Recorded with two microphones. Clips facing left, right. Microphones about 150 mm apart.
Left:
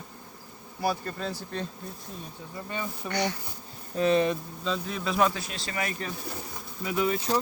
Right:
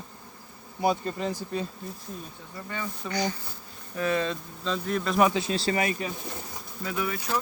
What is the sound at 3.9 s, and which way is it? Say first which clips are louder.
Speech: left 4 dB; 25° left (ahead or behind).